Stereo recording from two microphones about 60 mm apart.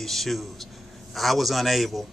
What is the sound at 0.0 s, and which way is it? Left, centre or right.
Speech, centre.